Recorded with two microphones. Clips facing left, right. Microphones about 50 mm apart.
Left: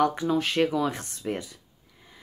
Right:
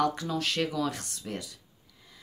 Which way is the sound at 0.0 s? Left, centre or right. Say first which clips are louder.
Left 5 dB; left.